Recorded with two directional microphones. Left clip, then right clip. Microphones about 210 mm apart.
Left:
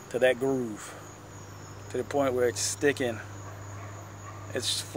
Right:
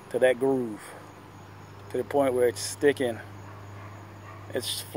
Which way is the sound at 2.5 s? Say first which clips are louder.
Left 3 dB; 50° left (ahead or behind).